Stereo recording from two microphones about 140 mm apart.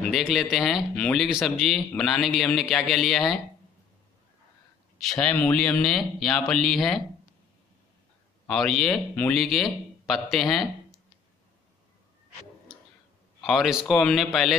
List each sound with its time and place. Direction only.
0.0 s speech: centre (ahead or behind)
5.0 s speech: 5° left (ahead or behind)
8.5 s speech: centre (ahead or behind)
13.4 s a man's voice: centre (ahead or behind)